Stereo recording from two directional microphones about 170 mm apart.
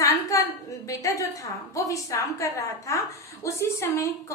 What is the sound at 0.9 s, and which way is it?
A woman's voice, 20° left (ahead or behind).